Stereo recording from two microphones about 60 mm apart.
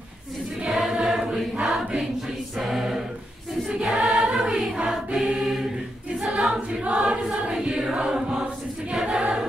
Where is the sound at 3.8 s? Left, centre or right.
Centre.